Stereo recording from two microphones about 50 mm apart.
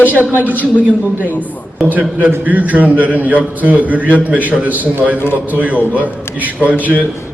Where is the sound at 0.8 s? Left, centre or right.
Right.